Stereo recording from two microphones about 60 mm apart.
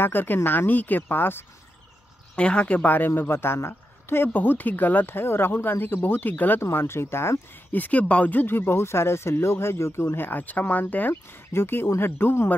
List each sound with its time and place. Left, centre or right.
0.0 s speech: left
2.3 s speech: centre
3.1 s speech: left
6.6 s speech: left
7.7 s speech: left
11.5 s speech: left